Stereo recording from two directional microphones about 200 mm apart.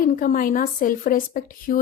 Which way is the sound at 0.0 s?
45° left (ahead or behind).